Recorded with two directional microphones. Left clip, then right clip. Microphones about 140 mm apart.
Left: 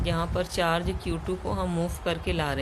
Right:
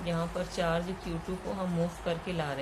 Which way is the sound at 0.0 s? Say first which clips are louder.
Left 5 dB; 65° left (ahead or behind).